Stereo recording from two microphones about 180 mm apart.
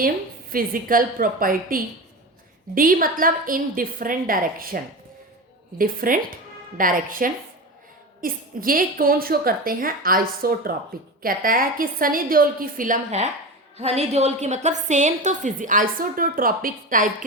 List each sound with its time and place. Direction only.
0.5 s a woman's voice: 50° right (ahead or behind)